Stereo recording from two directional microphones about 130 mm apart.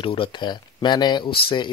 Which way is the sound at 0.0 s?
40° left (ahead or behind).